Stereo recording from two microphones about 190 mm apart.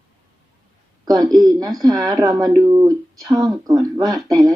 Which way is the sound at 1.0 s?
20° right (ahead or behind).